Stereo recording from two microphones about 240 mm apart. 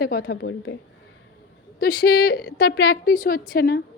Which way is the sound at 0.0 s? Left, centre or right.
Left.